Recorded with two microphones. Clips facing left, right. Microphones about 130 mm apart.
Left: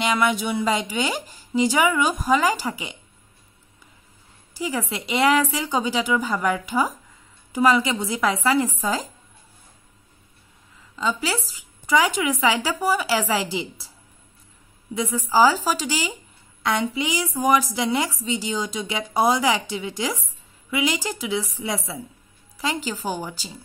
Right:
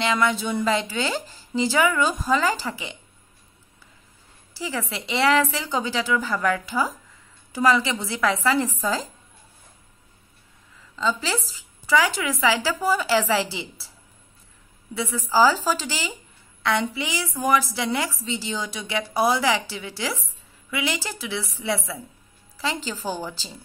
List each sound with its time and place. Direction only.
0.0 s a woman's voice: 15° left (ahead or behind)
4.6 s a woman's voice: 15° left (ahead or behind)
11.0 s a woman's voice: 10° left (ahead or behind)
15.0 s a woman's voice: 15° left (ahead or behind)